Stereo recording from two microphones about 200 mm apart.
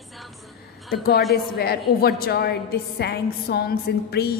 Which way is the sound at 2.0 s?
50° left (ahead or behind).